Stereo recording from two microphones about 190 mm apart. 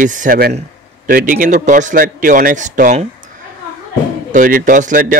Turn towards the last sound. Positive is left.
turn(degrees=-45)  # may be behind; listen again after turning